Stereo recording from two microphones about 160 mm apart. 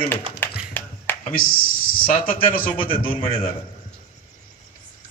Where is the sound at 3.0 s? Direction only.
35° left (ahead or behind).